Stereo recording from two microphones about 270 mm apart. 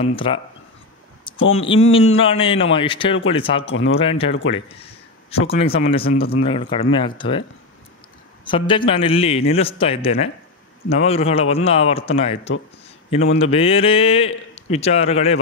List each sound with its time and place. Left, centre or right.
0.1 s a man's voice: centre
1.4 s speech: left
2.1 s a man's voice: centre
4.3 s speech: left
4.6 s a man's voice: left
8.5 s a man's voice: centre